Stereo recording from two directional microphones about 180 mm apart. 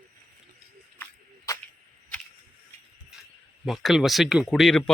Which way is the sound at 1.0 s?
20° left (ahead or behind).